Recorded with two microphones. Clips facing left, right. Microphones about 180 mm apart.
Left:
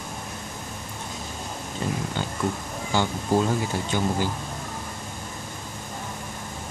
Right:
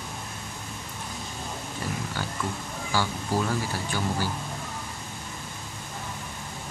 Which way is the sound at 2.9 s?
20° left (ahead or behind).